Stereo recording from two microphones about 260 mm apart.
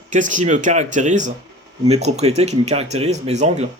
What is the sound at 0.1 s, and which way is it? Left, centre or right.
Speech, right.